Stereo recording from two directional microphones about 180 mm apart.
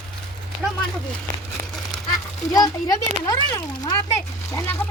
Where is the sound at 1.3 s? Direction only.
50° right (ahead or behind).